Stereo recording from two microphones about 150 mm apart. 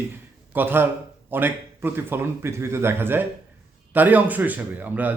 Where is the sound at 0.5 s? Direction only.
15° right (ahead or behind).